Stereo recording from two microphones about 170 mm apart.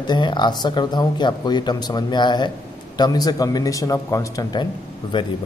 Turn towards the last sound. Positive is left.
turn(degrees=25)  # may be behind; listen again after turning